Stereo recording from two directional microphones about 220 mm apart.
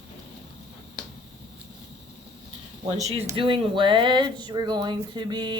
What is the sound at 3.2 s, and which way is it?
Speech, 20° right (ahead or behind).